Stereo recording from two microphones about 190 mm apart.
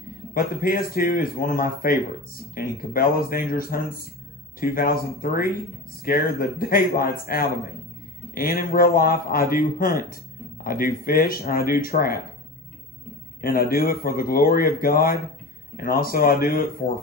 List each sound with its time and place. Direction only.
0.3 s a man's voice: 50° left (ahead or behind)
13.4 s a man's voice: 50° left (ahead or behind)